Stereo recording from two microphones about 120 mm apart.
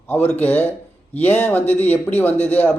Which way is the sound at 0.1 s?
15° left (ahead or behind).